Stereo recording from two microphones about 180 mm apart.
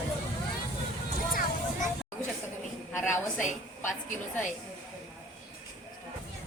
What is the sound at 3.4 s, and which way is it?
Speech, 45° left (ahead or behind).